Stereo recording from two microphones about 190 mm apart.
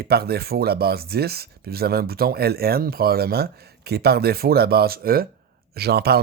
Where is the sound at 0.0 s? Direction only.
55° right (ahead or behind).